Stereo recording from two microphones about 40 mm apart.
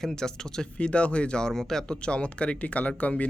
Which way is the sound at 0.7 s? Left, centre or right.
Left.